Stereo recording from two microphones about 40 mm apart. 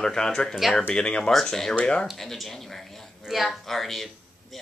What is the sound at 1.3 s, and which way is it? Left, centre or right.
Speech, centre.